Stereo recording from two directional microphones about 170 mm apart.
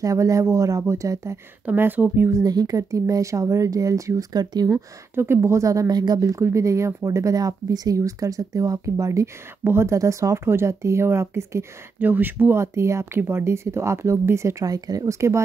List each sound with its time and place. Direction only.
0.0 s speech: 20° right (ahead or behind)